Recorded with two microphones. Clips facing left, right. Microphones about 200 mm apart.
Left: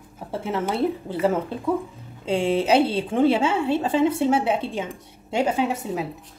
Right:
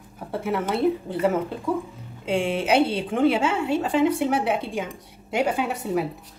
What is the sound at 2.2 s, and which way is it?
A woman's voice, 30° left (ahead or behind).